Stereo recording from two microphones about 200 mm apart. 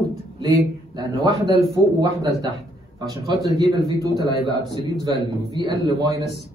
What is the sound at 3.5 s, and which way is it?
Speech, 20° right (ahead or behind).